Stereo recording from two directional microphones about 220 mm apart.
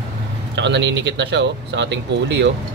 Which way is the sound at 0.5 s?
55° right (ahead or behind).